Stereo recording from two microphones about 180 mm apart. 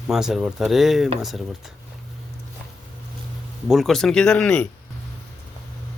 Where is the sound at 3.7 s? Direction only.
Centre (ahead or behind).